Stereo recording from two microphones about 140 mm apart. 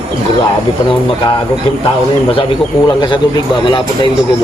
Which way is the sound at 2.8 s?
35° left (ahead or behind).